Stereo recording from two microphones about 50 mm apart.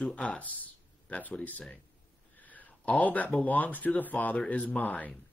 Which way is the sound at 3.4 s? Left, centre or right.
Left.